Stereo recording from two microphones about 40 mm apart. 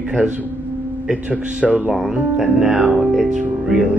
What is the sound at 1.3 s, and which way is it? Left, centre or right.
Speech, right.